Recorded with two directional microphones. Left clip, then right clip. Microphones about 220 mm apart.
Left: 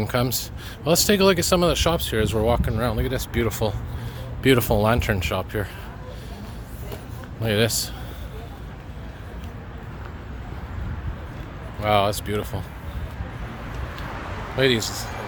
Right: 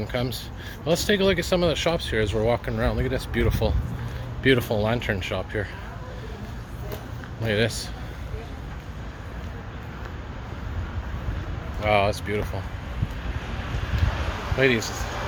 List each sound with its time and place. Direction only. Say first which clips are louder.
0.0 s speech: left 4 dB; 30° left (ahead or behind)
7.4 s speech: left 2 dB; 20° left (ahead or behind)
11.8 s speech: left 1 dB; 15° left (ahead or behind)
14.6 s speech: left 1 dB; 15° left (ahead or behind)